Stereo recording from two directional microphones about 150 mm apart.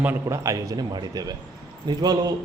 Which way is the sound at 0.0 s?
15° right (ahead or behind).